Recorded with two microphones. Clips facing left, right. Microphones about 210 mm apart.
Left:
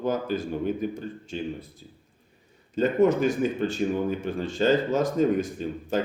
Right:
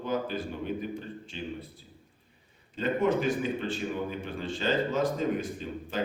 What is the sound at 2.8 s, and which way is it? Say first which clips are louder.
A man's voice: left 6 dB; 45° left (ahead or behind).